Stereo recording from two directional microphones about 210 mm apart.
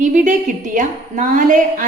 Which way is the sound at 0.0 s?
35° right (ahead or behind).